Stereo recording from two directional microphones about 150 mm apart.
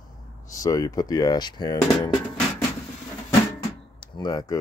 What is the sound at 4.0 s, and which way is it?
Speech, 25° left (ahead or behind).